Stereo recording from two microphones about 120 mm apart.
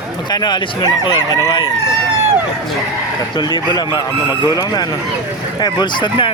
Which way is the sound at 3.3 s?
40° left (ahead or behind).